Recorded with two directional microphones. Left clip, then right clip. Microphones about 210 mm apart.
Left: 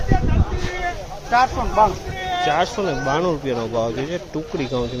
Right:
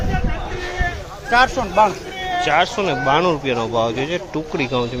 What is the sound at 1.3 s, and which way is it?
Speech, 35° right (ahead or behind).